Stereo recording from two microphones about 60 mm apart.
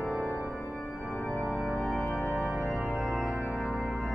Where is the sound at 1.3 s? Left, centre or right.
Centre.